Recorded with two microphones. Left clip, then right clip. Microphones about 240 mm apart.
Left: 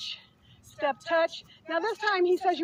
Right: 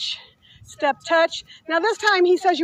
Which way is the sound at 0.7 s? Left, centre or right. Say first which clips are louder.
Right 7 dB; right.